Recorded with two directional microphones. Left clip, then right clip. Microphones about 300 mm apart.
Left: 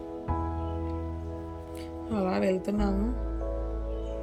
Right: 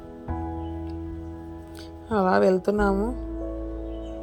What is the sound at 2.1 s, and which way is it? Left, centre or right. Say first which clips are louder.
Speech: right 8 dB; centre.